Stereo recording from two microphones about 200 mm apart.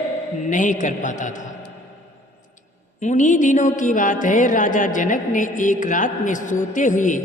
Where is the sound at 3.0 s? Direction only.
40° left (ahead or behind).